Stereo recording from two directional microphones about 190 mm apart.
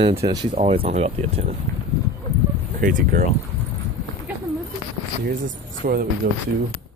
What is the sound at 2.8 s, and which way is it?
Speech, 45° right (ahead or behind).